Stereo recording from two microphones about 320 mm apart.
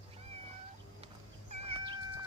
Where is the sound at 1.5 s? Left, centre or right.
Centre.